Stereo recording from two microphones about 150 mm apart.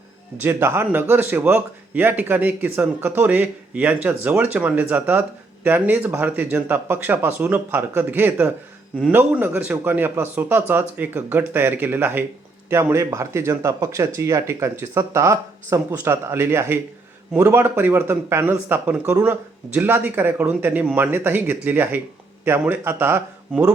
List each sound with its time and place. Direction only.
0.3 s speech: 15° right (ahead or behind)